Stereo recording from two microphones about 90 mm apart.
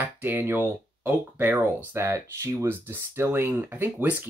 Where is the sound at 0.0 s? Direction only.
25° right (ahead or behind).